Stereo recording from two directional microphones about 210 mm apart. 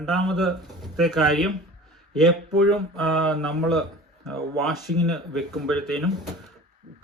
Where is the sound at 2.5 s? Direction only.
90° right.